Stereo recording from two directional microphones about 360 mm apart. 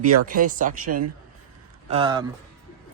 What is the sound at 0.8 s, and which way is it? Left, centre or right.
Speech, right.